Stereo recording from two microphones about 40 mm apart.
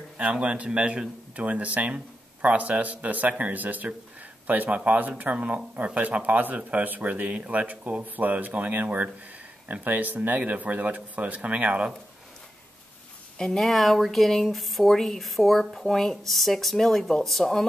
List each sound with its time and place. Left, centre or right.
0.2 s speech: right
10.4 s speech: right
13.5 s speech: centre